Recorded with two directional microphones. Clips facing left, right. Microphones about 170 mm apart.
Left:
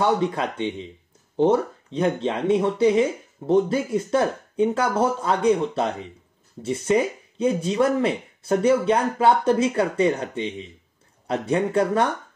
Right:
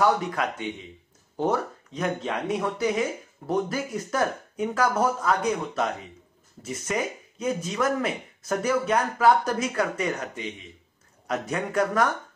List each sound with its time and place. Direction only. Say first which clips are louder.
0.0 s speech: left 2 dB; 30° left (ahead or behind)